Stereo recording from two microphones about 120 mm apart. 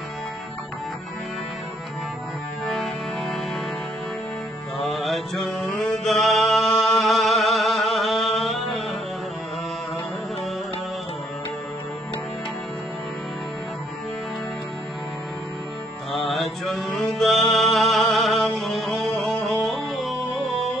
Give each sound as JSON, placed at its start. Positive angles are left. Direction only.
{"t": 2.6, "sound": "music", "side_deg": 0}
{"t": 4.7, "sound": "mantra", "side_deg": 0}
{"t": 8.4, "sound": "a sound", "side_deg": 0}
{"t": 16.1, "sound": "mantra", "side_deg": 0}